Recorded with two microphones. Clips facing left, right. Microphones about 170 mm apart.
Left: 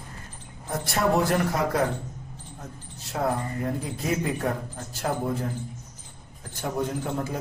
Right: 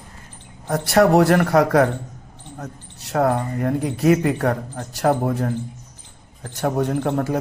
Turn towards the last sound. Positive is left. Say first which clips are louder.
# right 8 dB
turn(degrees=-65)  # may be behind; listen again after turning